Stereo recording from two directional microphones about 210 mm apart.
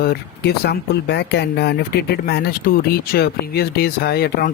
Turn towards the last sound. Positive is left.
turn(degrees=45)  # may be behind; listen again after turning